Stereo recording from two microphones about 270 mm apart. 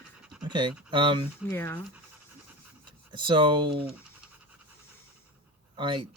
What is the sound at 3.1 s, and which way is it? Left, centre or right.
Speech, centre.